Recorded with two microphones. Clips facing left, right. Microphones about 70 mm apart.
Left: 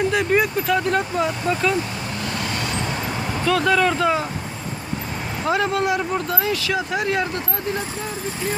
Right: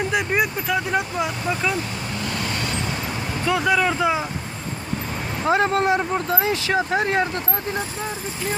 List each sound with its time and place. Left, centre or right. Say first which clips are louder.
0.1 s speech: left 3 dB; centre
3.4 s speech: left 2 dB; centre
5.5 s speech: right 2 dB; right